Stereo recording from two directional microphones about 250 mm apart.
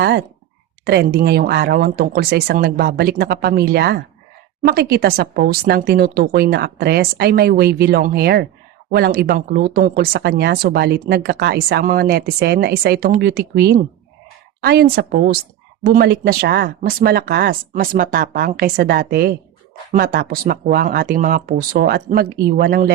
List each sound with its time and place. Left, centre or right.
0.0 s speech: right